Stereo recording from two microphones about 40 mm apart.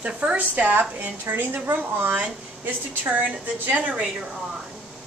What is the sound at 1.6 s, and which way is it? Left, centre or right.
Speech, right.